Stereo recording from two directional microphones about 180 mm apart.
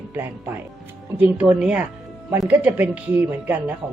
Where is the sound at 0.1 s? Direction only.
10° right (ahead or behind).